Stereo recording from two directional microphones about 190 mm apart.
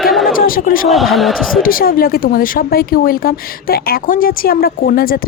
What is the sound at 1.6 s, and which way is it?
Speech, 50° left (ahead or behind).